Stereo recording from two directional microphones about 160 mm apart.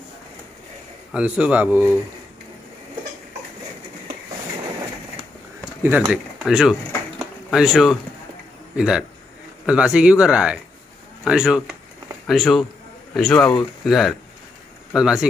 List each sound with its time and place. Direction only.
1.1 s speech: 5° right (ahead or behind)
5.8 s speech: 15° right (ahead or behind)
7.2 s a sound: 5° right (ahead or behind)
8.7 s a man's voice: 5° right (ahead or behind)